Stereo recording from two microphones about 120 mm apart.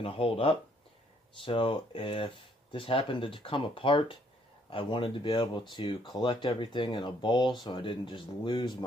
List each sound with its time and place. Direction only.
0.0 s speech: 50° left (ahead or behind)